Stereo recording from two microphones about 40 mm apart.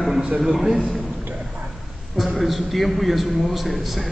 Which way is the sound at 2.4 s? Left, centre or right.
Centre.